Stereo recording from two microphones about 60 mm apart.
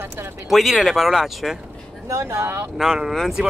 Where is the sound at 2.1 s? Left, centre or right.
Right.